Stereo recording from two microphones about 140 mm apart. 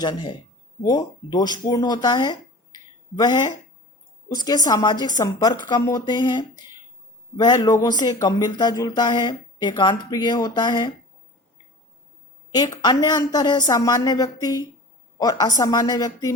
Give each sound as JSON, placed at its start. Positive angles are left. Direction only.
{"t": 0.0, "sound": "a woman's voice", "side_deg": 35}
{"t": 12.5, "sound": "a woman's voice", "side_deg": 30}